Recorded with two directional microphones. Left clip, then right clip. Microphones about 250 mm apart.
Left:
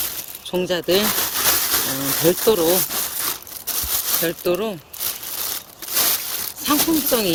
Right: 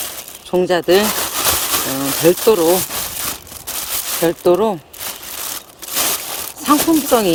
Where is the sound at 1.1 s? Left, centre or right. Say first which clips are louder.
Right 3 dB; right.